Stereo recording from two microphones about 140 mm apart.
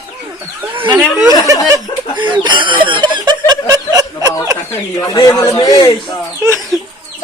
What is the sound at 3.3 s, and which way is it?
Snicker, 30° right (ahead or behind).